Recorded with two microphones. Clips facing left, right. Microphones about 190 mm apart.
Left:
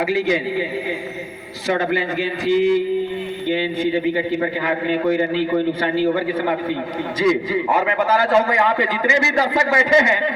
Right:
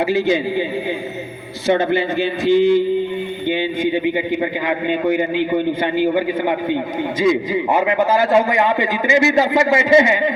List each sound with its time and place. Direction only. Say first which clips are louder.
0.1 s a man's voice: right 2 dB; 25° right (ahead or behind)
1.6 s a man's voice: right 4 dB; 25° right (ahead or behind)